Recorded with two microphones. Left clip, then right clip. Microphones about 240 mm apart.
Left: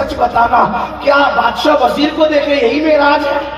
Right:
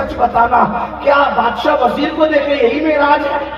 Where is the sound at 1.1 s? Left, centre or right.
Left.